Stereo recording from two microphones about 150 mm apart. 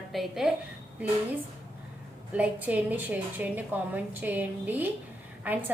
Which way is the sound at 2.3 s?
10° right (ahead or behind).